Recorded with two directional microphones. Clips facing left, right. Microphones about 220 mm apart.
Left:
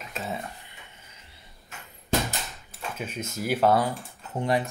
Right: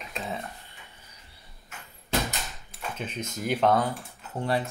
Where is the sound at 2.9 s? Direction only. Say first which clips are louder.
Left 1 dB; 10° left (ahead or behind).